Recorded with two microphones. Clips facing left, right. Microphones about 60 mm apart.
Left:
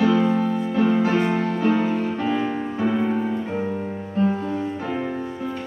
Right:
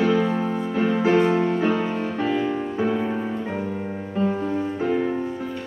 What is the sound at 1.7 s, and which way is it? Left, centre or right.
Music, centre.